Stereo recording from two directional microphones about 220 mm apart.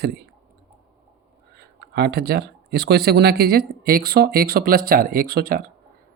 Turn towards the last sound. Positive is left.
turn(degrees=-45)  # may be behind; listen again after turning